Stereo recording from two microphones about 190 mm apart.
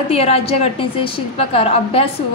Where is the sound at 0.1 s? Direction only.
30° left (ahead or behind).